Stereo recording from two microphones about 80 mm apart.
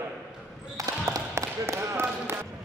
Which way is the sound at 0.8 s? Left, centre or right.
Right.